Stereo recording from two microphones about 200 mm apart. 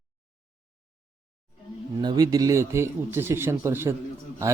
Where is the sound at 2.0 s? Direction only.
20° right (ahead or behind).